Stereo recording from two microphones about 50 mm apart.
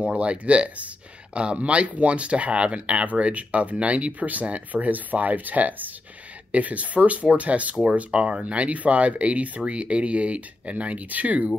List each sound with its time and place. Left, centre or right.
0.0 s speech: right